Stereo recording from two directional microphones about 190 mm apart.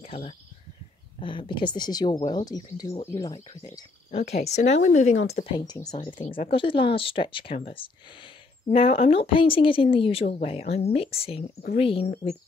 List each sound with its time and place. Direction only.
0.0 s a sound: 30° left (ahead or behind)
1.2 s a woman's voice: 25° left (ahead or behind)
4.1 s a woman's voice: 35° left (ahead or behind)
5.7 s a woman's voice: 20° left (ahead or behind)
6.2 s a woman's voice: 30° left (ahead or behind)